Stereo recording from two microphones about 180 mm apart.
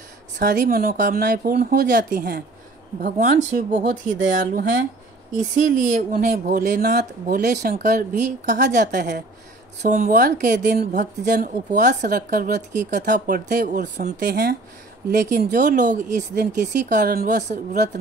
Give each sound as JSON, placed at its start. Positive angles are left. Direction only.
{"t": 0.4, "sound": "a woman's voice", "side_deg": -50}
{"t": 14.3, "sound": "speech", "side_deg": -60}
{"t": 15.0, "sound": "a woman's voice", "side_deg": -50}
{"t": 17.4, "sound": "speech", "side_deg": -40}